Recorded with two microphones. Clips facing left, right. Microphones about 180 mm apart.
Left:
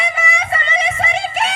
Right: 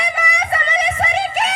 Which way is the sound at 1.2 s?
30° left (ahead or behind).